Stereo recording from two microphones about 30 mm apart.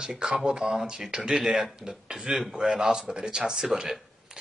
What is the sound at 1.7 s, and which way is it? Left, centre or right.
Speech, right.